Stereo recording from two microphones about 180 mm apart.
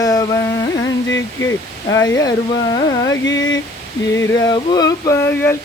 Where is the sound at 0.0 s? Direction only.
20° left (ahead or behind).